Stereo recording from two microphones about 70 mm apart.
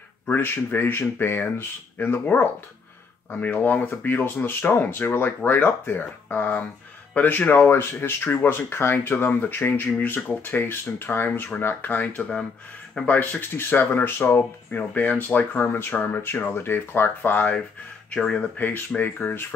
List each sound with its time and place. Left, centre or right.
0.3 s speech: left
18.2 s speech: centre
18.6 s speech: left